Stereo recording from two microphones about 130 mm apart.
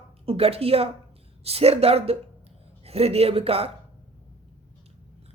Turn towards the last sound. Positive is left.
turn(degrees=-50)  # may be behind; listen again after turning